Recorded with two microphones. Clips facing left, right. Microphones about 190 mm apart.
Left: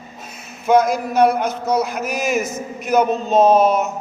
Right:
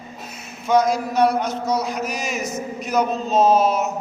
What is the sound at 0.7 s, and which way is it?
A man's voice, 55° left (ahead or behind).